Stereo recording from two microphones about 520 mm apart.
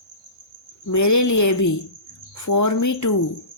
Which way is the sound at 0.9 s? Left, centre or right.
Left.